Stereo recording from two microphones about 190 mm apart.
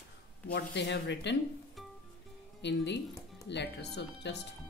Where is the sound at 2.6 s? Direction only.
65° left (ahead or behind).